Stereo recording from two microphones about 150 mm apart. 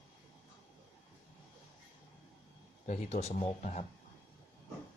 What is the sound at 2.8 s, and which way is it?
Speech, 45° left (ahead or behind).